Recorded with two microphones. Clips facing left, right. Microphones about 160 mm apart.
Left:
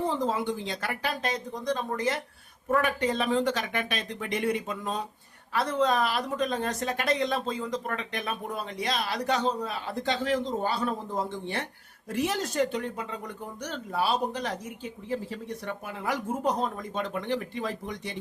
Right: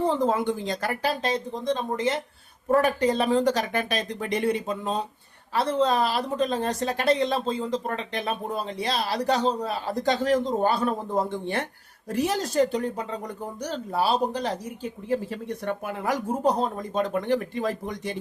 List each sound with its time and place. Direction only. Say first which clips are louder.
0.0 s a woman's voice: right 5 dB; 55° right (ahead or behind); by 2.2 s 25° right (ahead or behind)
2.6 s a woman's voice: right 5 dB; 35° right (ahead or behind); by 11.6 s 55° right (ahead or behind)
12.0 s a woman's voice: right 3 dB; 40° right (ahead or behind)
14.8 s speech: right 6 dB; 50° right (ahead or behind)